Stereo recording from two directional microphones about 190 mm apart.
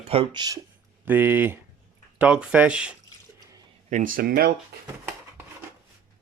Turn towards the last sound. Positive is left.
turn(degrees=-55)  # may be behind; listen again after turning